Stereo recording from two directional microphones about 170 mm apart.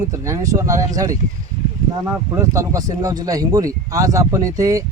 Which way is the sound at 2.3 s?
15° right (ahead or behind).